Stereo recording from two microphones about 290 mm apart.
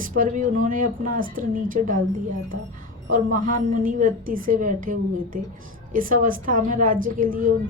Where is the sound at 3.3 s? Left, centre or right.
Right.